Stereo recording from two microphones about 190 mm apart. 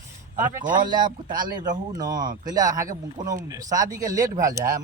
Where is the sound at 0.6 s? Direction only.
45° right (ahead or behind).